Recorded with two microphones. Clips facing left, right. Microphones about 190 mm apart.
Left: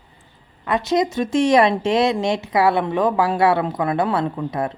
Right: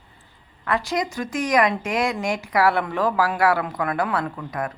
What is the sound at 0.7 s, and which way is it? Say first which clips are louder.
Speech: left 5 dB; 20° left (ahead or behind).